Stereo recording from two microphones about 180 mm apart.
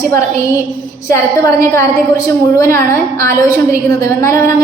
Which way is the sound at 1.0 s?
15° left (ahead or behind).